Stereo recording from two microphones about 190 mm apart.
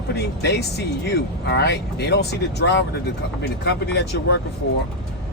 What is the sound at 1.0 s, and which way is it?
Speech, 60° left (ahead or behind).